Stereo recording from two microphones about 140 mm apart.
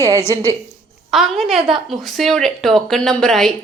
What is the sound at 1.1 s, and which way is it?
A woman's voice, centre (ahead or behind).